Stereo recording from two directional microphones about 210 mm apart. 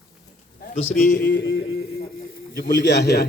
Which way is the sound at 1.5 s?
65° left (ahead or behind).